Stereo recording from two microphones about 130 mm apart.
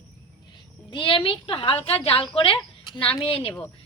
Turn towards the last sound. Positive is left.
turn(degrees=50)  # may be behind; listen again after turning